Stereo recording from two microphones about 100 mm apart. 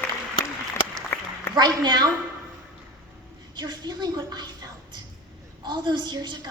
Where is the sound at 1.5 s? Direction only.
45° right (ahead or behind).